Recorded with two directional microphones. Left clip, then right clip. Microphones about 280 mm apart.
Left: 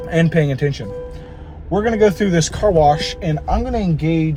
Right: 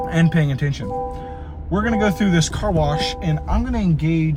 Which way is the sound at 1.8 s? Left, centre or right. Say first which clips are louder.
Left 5 dB; centre.